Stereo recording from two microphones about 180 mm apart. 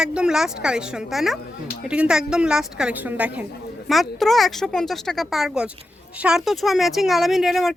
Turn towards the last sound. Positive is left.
turn(degrees=0)  # may be behind; listen again after turning